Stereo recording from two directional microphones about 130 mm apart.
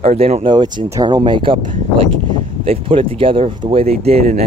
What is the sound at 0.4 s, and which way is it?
Speech, 35° right (ahead or behind).